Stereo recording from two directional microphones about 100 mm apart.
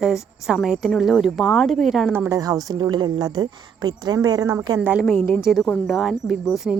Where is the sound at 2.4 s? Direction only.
35° right (ahead or behind).